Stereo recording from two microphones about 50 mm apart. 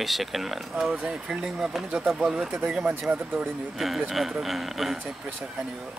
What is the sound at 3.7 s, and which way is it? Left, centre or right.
Speech, centre.